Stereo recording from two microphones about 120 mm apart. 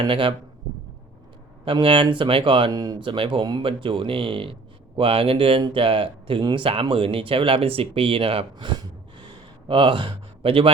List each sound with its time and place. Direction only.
0.0 s speech: 45° right (ahead or behind)
1.6 s speech: 45° right (ahead or behind)